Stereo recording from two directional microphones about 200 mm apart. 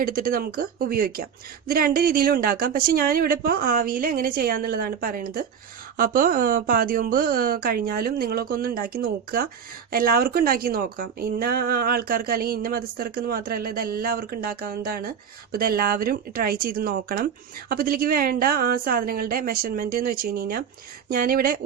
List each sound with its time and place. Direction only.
0.0 s speech: 45° right (ahead or behind)